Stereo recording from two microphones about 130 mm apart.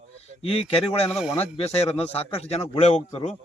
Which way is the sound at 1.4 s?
50° left (ahead or behind).